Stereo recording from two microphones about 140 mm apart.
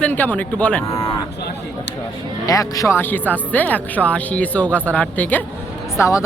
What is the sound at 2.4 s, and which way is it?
Speech, 25° left (ahead or behind).